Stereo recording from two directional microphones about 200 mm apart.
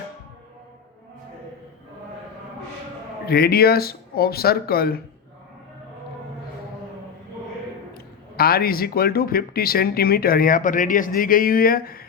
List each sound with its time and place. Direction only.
3.2 s speech: 50° left (ahead or behind)
7.9 s speech: 50° left (ahead or behind)